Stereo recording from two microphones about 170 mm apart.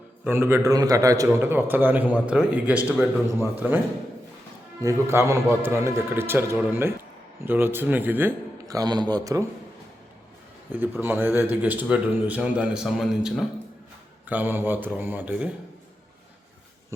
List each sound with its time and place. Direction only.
0.3 s a man's voice: 15° right (ahead or behind)
4.8 s a man's voice: 15° right (ahead or behind)
10.7 s a man's voice: 10° right (ahead or behind)